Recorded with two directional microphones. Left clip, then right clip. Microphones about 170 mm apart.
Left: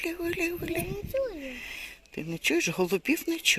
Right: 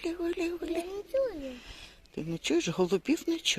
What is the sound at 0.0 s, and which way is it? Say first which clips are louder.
Speech: left 2 dB; centre (ahead or behind).